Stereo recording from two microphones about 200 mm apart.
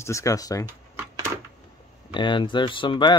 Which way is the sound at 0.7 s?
10° right (ahead or behind).